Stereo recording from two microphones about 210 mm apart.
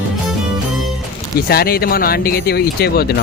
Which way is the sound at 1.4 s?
45° left (ahead or behind).